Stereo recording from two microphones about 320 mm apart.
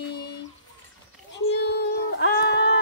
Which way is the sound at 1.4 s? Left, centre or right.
Left.